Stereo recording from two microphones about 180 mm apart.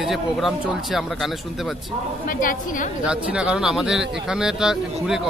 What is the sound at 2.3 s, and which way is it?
Speech, 50° left (ahead or behind).